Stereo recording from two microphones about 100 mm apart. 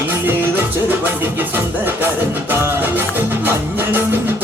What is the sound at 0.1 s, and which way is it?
Music, 20° right (ahead or behind).